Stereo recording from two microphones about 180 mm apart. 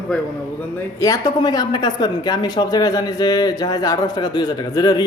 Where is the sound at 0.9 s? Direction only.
20° left (ahead or behind).